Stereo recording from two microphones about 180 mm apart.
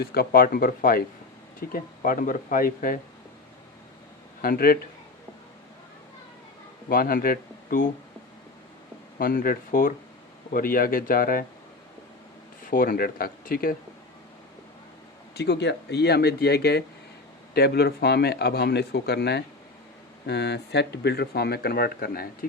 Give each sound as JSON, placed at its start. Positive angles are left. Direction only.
{"t": 0.0, "sound": "speech", "side_deg": 60}
{"t": 4.4, "sound": "speech", "side_deg": 55}
{"t": 6.8, "sound": "speech", "side_deg": 55}
{"t": 9.1, "sound": "speech", "side_deg": 55}
{"t": 12.7, "sound": "speech", "side_deg": 50}
{"t": 15.4, "sound": "speech", "side_deg": 70}